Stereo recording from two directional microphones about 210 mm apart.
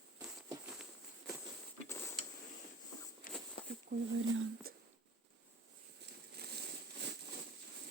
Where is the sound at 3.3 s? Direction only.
40° left (ahead or behind).